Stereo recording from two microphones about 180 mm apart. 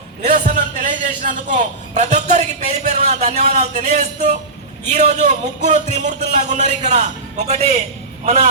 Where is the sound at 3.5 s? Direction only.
40° right (ahead or behind).